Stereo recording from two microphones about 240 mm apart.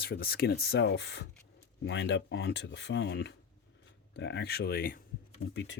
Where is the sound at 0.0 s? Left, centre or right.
Left.